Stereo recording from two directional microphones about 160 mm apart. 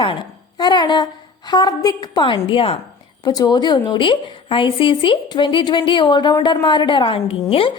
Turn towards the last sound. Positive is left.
turn(degrees=35)  # may be behind; listen again after turning